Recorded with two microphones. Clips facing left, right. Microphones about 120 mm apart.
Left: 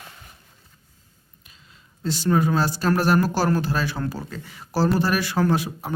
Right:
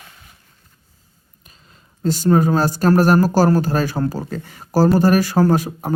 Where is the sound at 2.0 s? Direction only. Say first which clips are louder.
Right 5 dB; 45° right (ahead or behind).